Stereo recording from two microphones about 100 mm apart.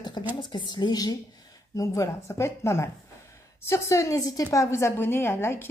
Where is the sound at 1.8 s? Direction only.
30° left (ahead or behind).